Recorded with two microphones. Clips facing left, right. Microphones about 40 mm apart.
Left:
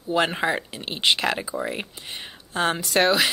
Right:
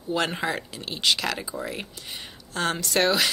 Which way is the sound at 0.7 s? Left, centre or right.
Left.